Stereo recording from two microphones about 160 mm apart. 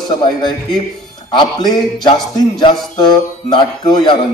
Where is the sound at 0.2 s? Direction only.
30° left (ahead or behind).